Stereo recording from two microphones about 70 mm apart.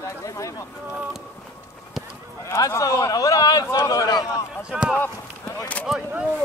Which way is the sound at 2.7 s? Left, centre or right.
Left.